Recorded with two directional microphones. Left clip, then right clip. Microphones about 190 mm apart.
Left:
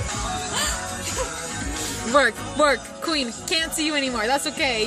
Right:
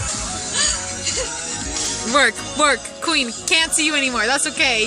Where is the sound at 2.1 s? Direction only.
5° right (ahead or behind).